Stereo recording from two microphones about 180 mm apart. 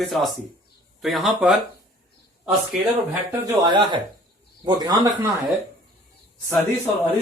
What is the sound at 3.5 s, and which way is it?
Speech, 25° right (ahead or behind).